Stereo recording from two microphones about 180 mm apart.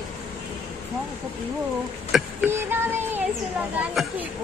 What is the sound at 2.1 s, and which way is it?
Speech, 10° right (ahead or behind).